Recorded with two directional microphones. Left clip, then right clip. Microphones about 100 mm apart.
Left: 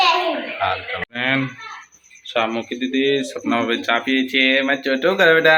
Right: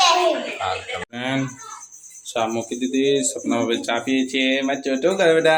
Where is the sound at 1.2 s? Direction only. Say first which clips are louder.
Left 6 dB; 20° right (ahead or behind).